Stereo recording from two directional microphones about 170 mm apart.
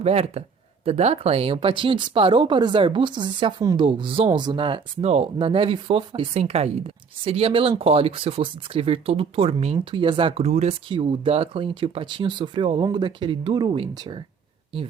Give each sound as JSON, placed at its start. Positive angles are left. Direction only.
{"t": 0.0, "sound": "speech", "side_deg": -40}